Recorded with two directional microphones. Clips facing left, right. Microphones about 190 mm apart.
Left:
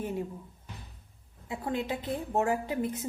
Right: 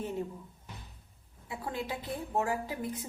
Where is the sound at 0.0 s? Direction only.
10° left (ahead or behind).